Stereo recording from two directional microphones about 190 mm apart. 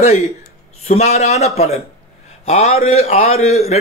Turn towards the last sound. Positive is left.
turn(degrees=35)  # may be behind; listen again after turning